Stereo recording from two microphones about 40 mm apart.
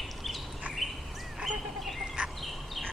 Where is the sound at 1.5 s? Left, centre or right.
Centre.